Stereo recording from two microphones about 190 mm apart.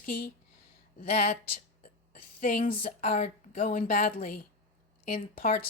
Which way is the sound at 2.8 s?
35° left (ahead or behind).